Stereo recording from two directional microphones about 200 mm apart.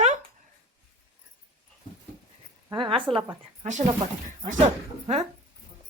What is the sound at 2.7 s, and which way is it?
Speech, 25° right (ahead or behind).